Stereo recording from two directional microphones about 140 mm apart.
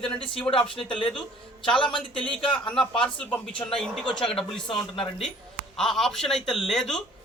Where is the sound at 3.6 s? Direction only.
20° left (ahead or behind).